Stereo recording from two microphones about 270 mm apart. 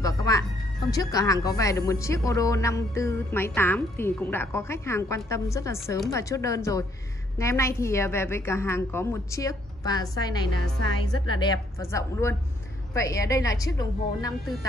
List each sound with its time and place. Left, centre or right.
0.0 s music: centre
0.8 s speech: centre
10.6 s a woman's voice: right
11.2 s speech: centre